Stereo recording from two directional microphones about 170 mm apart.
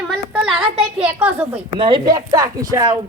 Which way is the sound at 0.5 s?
10° right (ahead or behind).